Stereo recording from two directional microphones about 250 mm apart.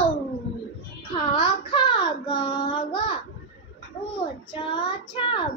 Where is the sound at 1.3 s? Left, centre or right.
Centre.